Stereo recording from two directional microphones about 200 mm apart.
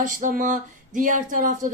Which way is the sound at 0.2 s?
40° right (ahead or behind).